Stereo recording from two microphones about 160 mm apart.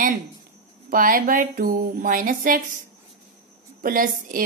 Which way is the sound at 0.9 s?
60° right (ahead or behind).